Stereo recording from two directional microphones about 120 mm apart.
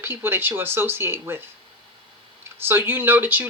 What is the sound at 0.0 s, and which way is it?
Speech, 20° right (ahead or behind).